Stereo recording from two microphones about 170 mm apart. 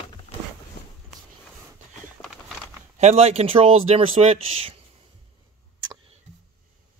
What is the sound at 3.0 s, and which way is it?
Speech, 40° right (ahead or behind).